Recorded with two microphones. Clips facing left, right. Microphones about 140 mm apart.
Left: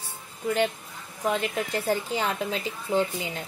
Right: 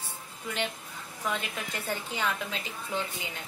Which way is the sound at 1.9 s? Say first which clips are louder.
Left 3 dB; 35° left (ahead or behind).